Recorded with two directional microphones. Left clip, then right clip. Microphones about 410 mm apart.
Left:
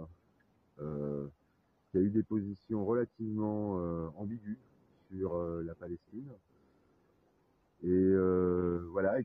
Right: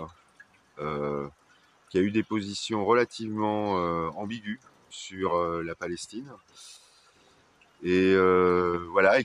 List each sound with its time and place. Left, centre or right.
0.7 s a sound: left
2.0 s speech: left
7.9 s speech: left